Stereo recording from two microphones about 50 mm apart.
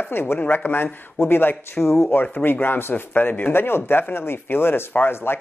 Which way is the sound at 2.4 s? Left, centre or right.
Left.